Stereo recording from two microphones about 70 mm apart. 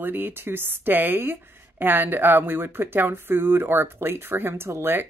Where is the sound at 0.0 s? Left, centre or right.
Right.